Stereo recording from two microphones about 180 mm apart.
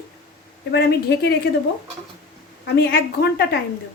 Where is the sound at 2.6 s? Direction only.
60° left (ahead or behind).